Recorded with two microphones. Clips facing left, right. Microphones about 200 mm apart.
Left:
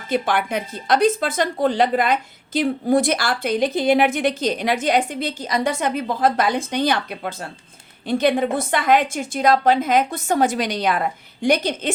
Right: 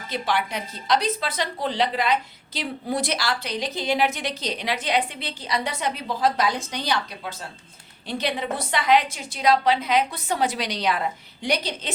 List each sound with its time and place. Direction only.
0.1 s a woman's voice: 50° left (ahead or behind)